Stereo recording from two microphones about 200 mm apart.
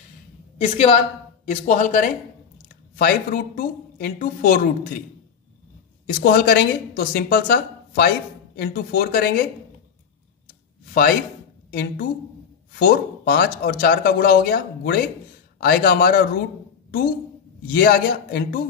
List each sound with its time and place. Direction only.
0.6 s speech: 30° left (ahead or behind)
6.0 s speech: 50° left (ahead or behind)
10.9 s speech: 45° left (ahead or behind)
17.7 s speech: 45° left (ahead or behind)